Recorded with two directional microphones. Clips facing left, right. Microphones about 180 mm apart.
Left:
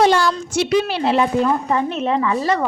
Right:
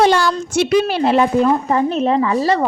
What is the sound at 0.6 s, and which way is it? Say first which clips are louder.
Speech: right 4 dB; 50° right (ahead or behind).